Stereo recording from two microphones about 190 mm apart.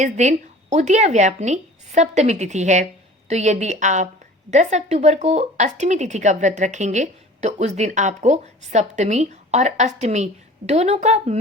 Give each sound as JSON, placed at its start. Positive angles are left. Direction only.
{"t": 0.0, "sound": "speech", "side_deg": -40}